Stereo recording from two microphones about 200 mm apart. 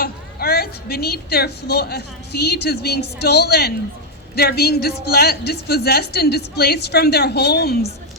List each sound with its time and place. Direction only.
0.0 s a woman's voice: 50° left (ahead or behind)